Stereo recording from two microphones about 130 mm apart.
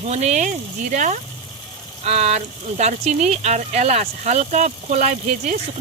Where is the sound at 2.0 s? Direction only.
55° right (ahead or behind).